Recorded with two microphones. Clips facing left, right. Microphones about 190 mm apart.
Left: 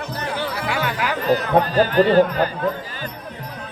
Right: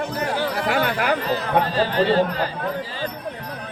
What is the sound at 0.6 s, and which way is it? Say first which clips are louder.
Chatter: right 3 dB; 50° right (ahead or behind).